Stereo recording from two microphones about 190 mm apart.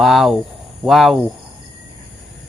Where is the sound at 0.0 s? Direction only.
Centre (ahead or behind).